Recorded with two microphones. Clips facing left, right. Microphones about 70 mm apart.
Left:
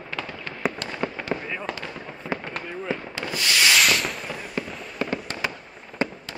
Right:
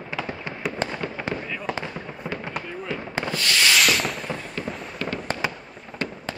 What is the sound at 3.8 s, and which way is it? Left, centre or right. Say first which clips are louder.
Sanding: even; centre.